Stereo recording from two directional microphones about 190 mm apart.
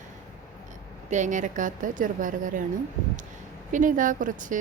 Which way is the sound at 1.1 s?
40° right (ahead or behind).